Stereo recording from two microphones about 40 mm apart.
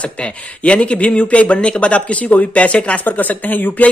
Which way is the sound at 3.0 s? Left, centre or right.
Left.